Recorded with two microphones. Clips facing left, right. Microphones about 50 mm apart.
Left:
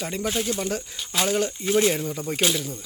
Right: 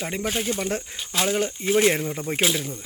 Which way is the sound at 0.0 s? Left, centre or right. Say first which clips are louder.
Even; centre.